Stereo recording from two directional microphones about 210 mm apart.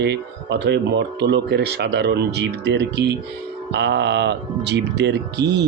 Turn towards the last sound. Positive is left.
turn(degrees=-55)  # may be behind; listen again after turning